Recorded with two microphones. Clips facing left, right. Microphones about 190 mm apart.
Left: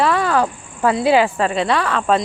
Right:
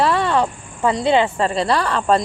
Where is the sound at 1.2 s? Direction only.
30° right (ahead or behind).